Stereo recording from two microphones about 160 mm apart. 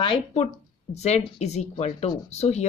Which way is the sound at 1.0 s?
45° left (ahead or behind).